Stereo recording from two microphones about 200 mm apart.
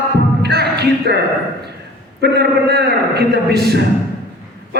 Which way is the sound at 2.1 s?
55° right (ahead or behind).